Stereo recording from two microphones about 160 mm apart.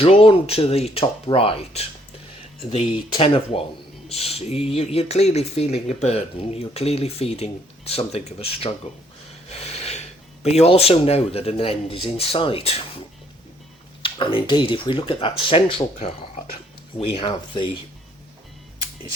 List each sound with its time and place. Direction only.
0.0 s speech: 35° left (ahead or behind)
3.2 s speech: 35° left (ahead or behind)
14.0 s speech: 35° left (ahead or behind)
16.0 s speech: 45° left (ahead or behind)
17.2 s speech: 30° left (ahead or behind)